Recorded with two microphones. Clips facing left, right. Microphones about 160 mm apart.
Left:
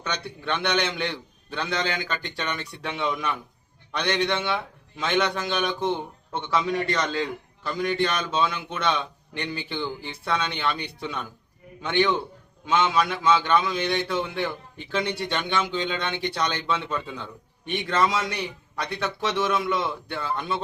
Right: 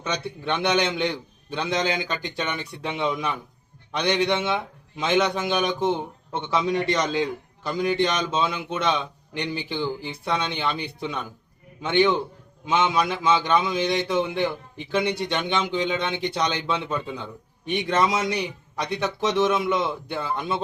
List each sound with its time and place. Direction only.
0.1 s speech: 15° right (ahead or behind)